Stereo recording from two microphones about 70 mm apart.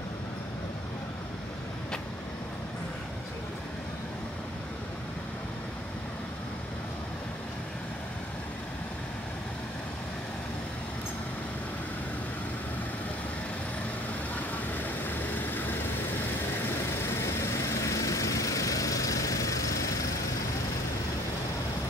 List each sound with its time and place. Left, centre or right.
14.7 s vehicle: left
17.2 s vehicle: left